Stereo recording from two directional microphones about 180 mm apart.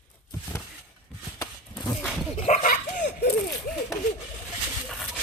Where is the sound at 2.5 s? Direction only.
45° left (ahead or behind).